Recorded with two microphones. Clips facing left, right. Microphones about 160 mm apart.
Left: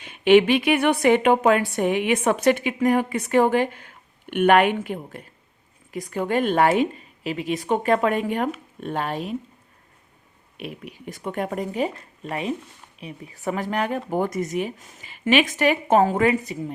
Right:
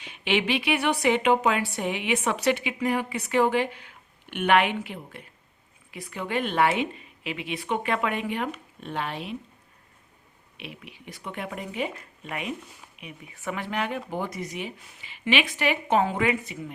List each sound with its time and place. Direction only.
0.0 s speech: 50° left (ahead or behind)
10.6 s speech: 45° left (ahead or behind)